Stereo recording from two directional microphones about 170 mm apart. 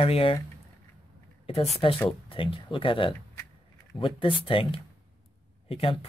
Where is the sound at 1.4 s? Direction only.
35° left (ahead or behind).